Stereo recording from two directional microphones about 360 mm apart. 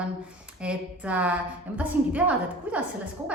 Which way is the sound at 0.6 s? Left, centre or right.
Centre.